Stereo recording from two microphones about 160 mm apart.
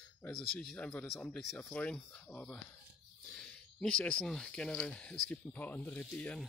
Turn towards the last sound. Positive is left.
turn(degrees=10)  # may be behind; listen again after turning